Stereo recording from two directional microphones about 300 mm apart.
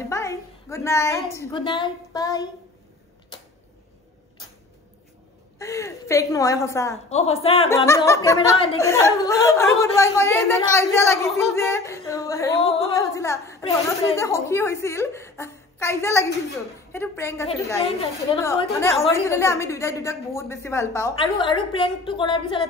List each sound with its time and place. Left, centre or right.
0.1 s a woman's voice: centre
5.6 s a woman's voice: centre
7.1 s a woman's voice: centre